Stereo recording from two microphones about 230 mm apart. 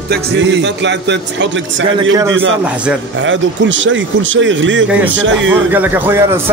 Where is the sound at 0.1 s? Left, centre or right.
Right.